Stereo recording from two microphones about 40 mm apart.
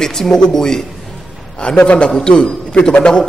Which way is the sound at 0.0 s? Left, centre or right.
Centre.